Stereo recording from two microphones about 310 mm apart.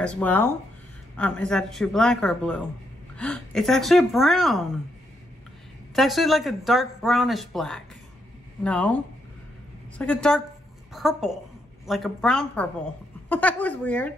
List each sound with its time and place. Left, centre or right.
0.0 s speech: centre
5.9 s a woman's voice: centre